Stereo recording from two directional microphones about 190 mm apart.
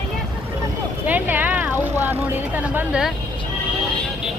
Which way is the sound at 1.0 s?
10° right (ahead or behind).